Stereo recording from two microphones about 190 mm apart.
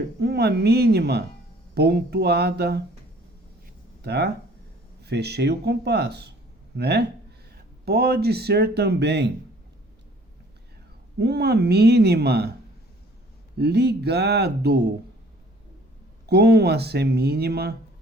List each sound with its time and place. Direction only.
0.2 s speech: 60° right (ahead or behind)
4.0 s speech: 60° right (ahead or behind)
11.2 s speech: 60° right (ahead or behind)
13.6 s speech: 60° right (ahead or behind)
16.2 s speech: 60° right (ahead or behind)